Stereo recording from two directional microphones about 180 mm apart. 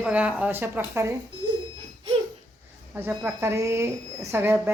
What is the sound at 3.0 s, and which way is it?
A woman's voice, 10° right (ahead or behind).